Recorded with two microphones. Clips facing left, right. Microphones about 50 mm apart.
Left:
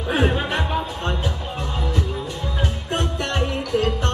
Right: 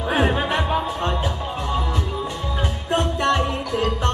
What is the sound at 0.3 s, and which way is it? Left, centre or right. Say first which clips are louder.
Music: right 2 dB; centre.